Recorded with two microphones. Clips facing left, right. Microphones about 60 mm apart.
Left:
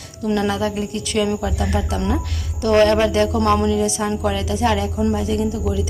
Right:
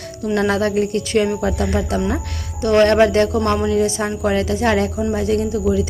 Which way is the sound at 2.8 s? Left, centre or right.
Right.